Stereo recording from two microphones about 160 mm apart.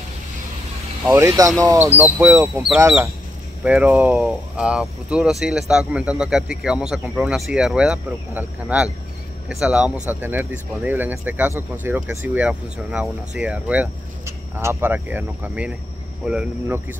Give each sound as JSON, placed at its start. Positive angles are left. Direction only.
{"t": 1.0, "sound": "speech", "side_deg": -15}